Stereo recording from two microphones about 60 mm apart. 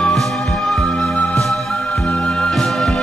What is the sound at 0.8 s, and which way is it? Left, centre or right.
Music, centre.